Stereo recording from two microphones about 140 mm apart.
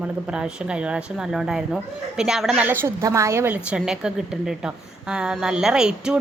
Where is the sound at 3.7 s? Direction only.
5° right (ahead or behind).